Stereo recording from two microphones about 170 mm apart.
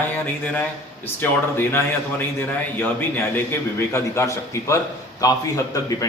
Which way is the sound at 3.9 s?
15° left (ahead or behind).